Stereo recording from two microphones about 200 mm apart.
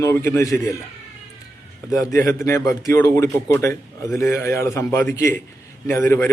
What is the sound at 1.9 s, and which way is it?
Speech, 15° left (ahead or behind).